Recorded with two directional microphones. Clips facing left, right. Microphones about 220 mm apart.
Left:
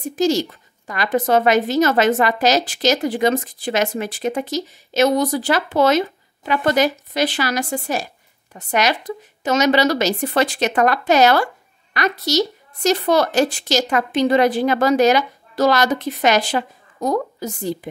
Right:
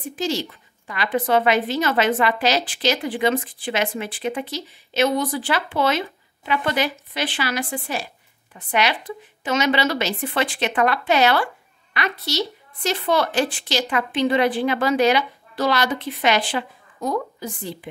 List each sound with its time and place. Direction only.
0.1 s a woman's voice: 45° left (ahead or behind)